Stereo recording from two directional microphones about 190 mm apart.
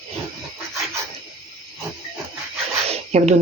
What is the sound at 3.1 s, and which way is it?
Speech, 35° right (ahead or behind).